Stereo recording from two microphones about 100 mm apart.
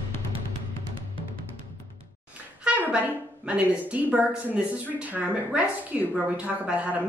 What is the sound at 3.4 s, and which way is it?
A woman's voice, 10° right (ahead or behind).